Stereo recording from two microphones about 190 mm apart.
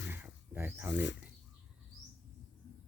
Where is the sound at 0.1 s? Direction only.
10° right (ahead or behind).